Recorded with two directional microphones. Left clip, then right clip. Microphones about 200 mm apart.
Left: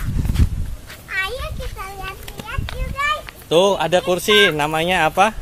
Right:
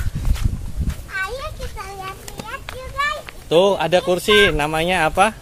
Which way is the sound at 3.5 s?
Centre (ahead or behind).